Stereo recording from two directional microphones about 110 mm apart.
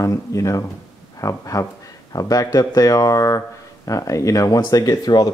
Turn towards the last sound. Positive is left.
turn(degrees=35)  # may be behind; listen again after turning